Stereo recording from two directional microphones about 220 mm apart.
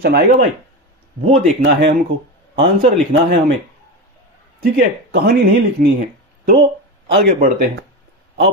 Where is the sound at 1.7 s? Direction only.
50° right (ahead or behind).